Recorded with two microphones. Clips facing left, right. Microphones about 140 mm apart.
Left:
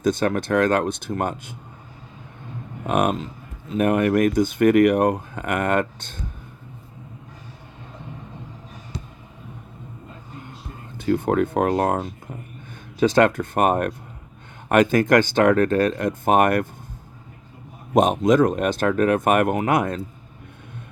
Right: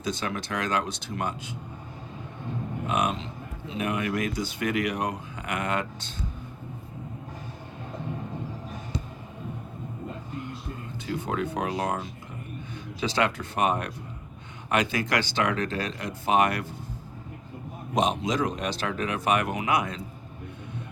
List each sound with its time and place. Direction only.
0.0 s speech: 50° left (ahead or behind)
2.8 s speech: 50° left (ahead or behind)
11.0 s speech: 50° left (ahead or behind)
17.9 s speech: 50° left (ahead or behind)